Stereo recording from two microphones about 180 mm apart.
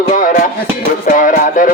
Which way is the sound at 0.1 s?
45° left (ahead or behind).